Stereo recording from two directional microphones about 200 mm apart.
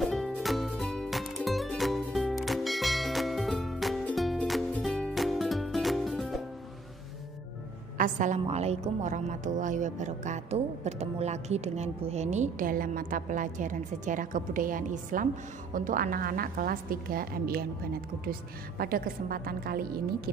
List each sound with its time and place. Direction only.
0.0 s music: centre (ahead or behind)
8.0 s a woman's voice: 40° right (ahead or behind)